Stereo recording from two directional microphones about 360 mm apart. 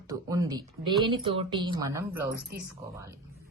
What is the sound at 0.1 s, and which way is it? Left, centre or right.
A woman's voice, centre.